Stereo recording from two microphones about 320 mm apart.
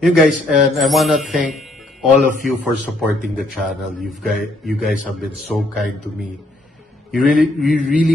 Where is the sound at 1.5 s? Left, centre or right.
Centre.